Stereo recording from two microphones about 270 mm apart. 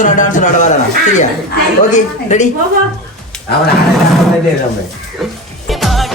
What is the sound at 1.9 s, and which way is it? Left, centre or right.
Speech, left.